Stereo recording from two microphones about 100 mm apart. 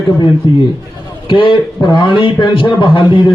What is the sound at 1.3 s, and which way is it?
A man's voice, 60° left (ahead or behind).